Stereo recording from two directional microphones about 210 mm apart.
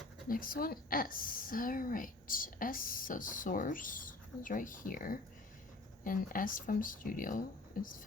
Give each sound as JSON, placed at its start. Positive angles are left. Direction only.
{"t": 0.3, "sound": "a woman's voice", "side_deg": 40}